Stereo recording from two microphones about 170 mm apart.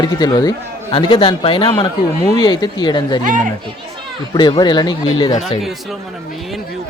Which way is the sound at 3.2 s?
50° right (ahead or behind).